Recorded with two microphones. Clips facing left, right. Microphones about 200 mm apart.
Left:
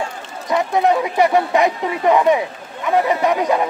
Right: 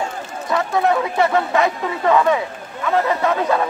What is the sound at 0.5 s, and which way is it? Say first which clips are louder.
Speech: left 2 dB; 20° left (ahead or behind).